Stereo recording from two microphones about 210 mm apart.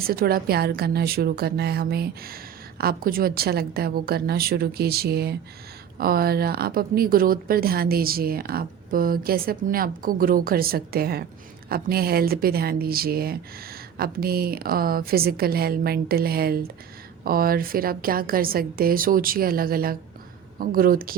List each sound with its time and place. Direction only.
0.0 s a woman's voice: 45° right (ahead or behind)